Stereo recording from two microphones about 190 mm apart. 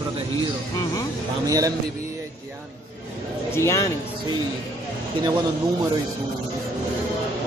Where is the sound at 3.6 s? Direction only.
15° left (ahead or behind).